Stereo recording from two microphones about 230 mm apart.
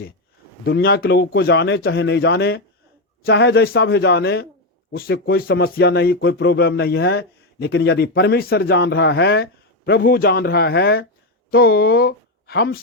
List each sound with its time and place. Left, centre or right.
0.6 s speech: left